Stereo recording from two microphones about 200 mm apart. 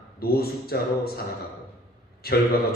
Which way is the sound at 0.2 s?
50° left (ahead or behind).